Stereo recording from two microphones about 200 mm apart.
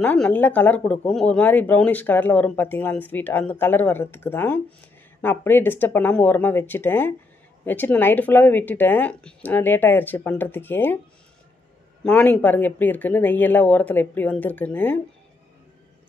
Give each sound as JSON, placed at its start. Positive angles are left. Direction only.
{"t": 0.0, "sound": "speech", "side_deg": 10}
{"t": 12.0, "sound": "speech", "side_deg": 5}